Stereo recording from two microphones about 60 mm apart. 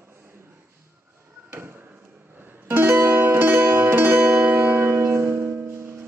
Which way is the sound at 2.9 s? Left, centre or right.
Right.